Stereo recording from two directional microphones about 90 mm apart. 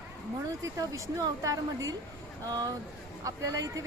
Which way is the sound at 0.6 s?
40° right (ahead or behind).